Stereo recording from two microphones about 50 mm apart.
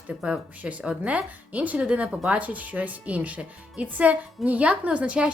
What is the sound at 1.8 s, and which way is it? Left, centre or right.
Speech, right.